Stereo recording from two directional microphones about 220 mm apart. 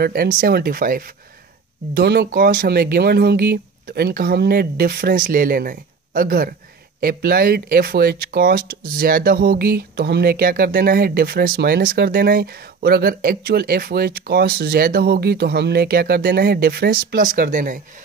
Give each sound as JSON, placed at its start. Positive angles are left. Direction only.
{"t": 0.0, "sound": "speech", "side_deg": -40}